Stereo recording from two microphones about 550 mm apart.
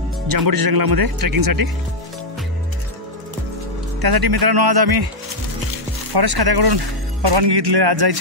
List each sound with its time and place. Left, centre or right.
0.3 s speech: right
4.0 s speech: right
6.1 s speech: right